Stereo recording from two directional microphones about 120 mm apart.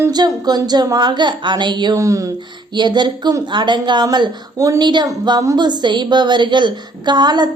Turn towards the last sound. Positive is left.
turn(degrees=-35)  # may be behind; listen again after turning